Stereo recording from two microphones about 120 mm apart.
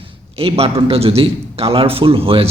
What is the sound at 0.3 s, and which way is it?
A man's voice, 55° right (ahead or behind).